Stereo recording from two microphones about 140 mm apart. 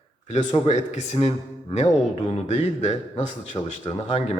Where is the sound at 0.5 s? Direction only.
50° left (ahead or behind).